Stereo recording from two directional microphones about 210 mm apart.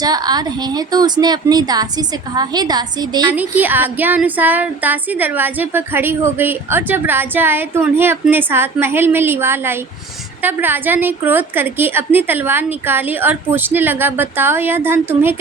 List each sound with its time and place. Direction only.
0.0 s a woman's voice: 20° right (ahead or behind)
3.3 s female singing: 10° right (ahead or behind)